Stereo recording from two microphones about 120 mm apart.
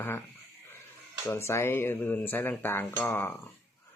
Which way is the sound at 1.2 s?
20° left (ahead or behind).